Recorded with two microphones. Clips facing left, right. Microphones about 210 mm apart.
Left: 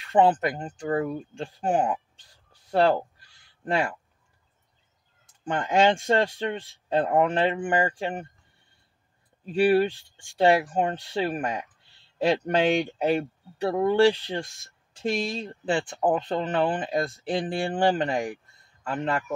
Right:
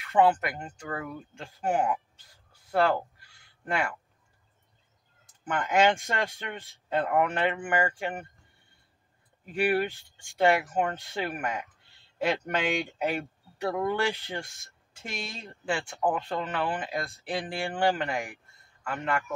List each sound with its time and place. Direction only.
0.0 s speech: 30° left (ahead or behind)
2.7 s a sound: 30° left (ahead or behind)
5.4 s speech: 30° left (ahead or behind)
9.5 s speech: 30° left (ahead or behind)